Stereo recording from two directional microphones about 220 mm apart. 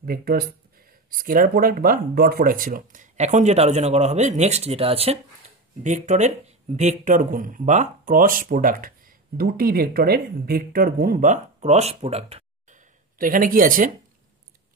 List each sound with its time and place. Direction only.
0.0 s speech: 45° right (ahead or behind); by 12.7 s 30° right (ahead or behind)
13.2 s speech: 40° right (ahead or behind)